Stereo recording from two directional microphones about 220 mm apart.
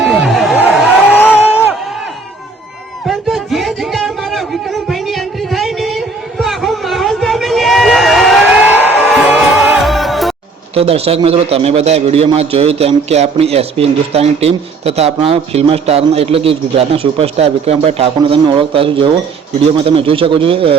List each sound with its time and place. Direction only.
0.0 s a sound: centre (ahead or behind)
1.4 s crowd: 5° right (ahead or behind)
3.1 s music: centre (ahead or behind)
10.8 s a man's voice: 25° right (ahead or behind)